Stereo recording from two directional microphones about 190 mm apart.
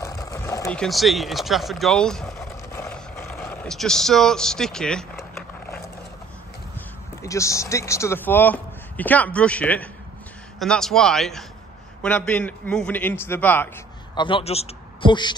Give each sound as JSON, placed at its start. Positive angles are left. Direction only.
{"t": 0.0, "sound": "sewing machine", "side_deg": 15}
{"t": 0.7, "sound": "speech", "side_deg": 5}
{"t": 2.7, "sound": "a sound", "side_deg": 15}
{"t": 3.3, "sound": "speech", "side_deg": 5}
{"t": 7.2, "sound": "a man's voice", "side_deg": 15}
{"t": 14.1, "sound": "a man's voice", "side_deg": 25}